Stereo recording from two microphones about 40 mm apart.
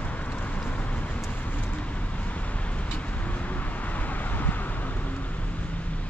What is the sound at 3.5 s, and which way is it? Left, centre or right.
Vehicle, left.